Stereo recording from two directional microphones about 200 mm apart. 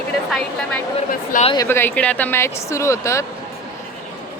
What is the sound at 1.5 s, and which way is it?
Speech, 15° left (ahead or behind).